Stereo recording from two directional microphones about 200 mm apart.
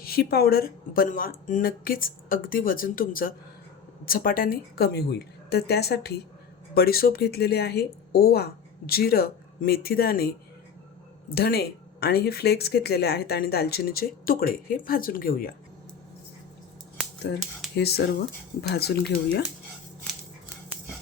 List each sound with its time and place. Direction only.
0.0 s speech: 50° left (ahead or behind)
17.7 s speech: 55° left (ahead or behind)